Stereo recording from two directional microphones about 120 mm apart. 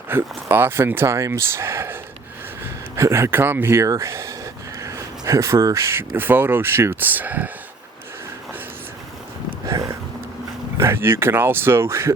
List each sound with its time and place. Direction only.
0.1 s speech: 20° right (ahead or behind)
9.6 s a sound: 25° right (ahead or behind)
10.8 s speech: 20° right (ahead or behind)